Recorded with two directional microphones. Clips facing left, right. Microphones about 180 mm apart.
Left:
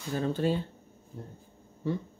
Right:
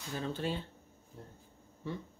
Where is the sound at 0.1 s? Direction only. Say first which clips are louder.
Left 8 dB; 45° left (ahead or behind).